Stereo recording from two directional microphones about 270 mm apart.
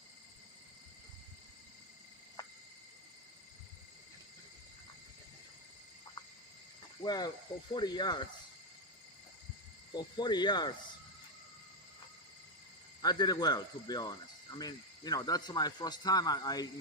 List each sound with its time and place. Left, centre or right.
7.0 s speech: centre
9.9 s speech: centre
13.0 s speech: centre